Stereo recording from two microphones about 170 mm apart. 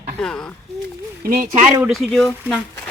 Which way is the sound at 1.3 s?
55° right (ahead or behind).